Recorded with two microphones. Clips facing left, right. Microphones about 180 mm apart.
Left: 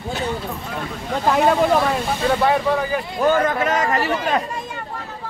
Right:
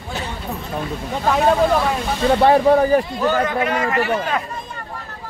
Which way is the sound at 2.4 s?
35° right (ahead or behind).